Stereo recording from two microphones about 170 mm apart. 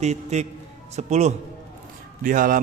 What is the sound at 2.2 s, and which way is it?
Speech, 55° right (ahead or behind).